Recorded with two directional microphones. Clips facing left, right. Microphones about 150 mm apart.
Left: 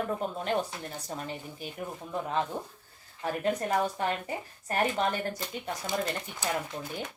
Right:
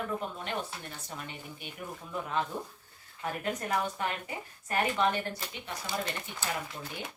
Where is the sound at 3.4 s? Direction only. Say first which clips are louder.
Left 4 dB; 35° left (ahead or behind).